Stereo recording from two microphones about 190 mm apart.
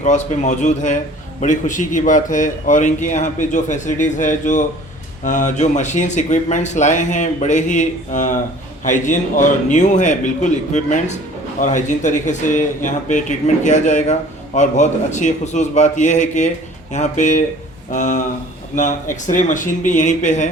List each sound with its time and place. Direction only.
0.0 s speech: 40° left (ahead or behind)